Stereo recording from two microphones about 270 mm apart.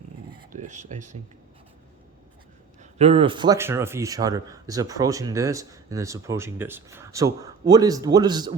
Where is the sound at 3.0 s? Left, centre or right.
Right.